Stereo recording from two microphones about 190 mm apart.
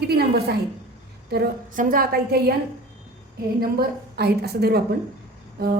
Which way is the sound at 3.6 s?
55° right (ahead or behind).